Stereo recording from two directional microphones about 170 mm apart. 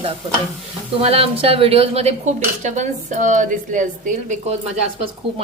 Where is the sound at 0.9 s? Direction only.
35° right (ahead or behind).